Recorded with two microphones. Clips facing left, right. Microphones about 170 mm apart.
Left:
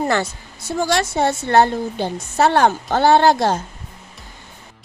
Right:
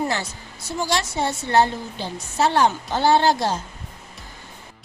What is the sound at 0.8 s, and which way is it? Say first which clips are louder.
A woman's voice: left 5 dB; 55° left (ahead or behind).